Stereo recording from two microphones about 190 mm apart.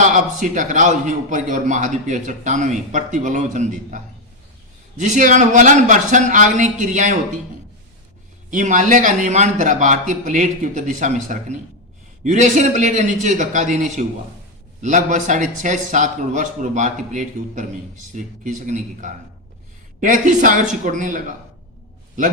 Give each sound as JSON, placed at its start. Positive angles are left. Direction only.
{"t": 0.0, "sound": "a man's voice", "side_deg": -40}
{"t": 8.4, "sound": "a man's voice", "side_deg": -40}